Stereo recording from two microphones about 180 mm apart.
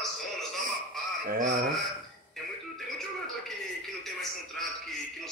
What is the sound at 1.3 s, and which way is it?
Speech, 45° right (ahead or behind).